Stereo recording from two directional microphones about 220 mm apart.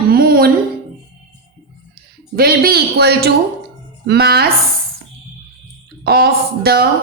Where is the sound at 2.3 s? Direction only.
45° right (ahead or behind).